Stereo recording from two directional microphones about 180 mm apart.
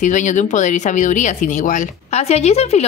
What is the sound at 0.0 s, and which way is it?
Speech, 45° left (ahead or behind).